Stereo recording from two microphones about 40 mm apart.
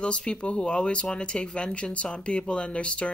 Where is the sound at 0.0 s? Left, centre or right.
Left.